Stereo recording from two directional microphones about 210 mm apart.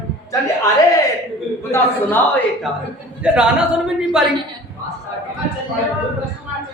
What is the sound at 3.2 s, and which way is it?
A man's voice, 5° right (ahead or behind).